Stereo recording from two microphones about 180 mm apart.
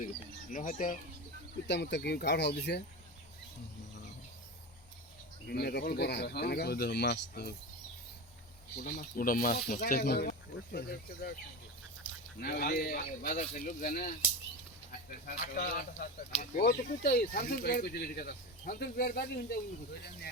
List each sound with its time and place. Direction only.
0.5 s speech: 45° left (ahead or behind)
1.6 s speech: 70° left (ahead or behind)
5.5 s speech: 60° left (ahead or behind)
8.8 s speech: 50° left (ahead or behind)
12.4 s speech: 55° left (ahead or behind)
15.3 s speech: 55° left (ahead or behind)